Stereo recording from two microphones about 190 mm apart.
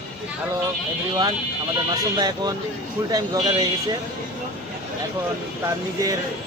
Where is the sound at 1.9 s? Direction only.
20° right (ahead or behind).